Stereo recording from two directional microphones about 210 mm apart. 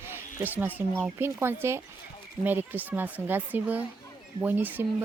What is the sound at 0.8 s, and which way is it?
Speech, 10° right (ahead or behind).